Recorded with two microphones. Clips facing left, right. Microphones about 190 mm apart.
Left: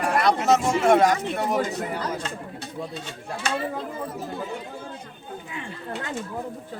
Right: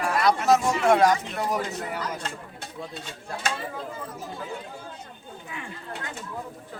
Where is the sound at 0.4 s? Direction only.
20° left (ahead or behind).